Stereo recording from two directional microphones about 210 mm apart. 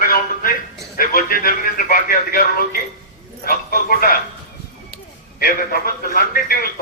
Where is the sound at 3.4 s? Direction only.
45° left (ahead or behind).